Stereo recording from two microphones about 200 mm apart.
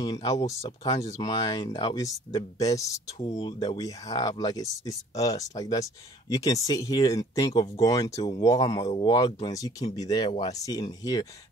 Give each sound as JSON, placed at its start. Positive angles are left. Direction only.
{"t": 0.0, "sound": "speech", "side_deg": 20}
{"t": 0.5, "sound": "speech", "side_deg": 30}
{"t": 0.8, "sound": "speech", "side_deg": 20}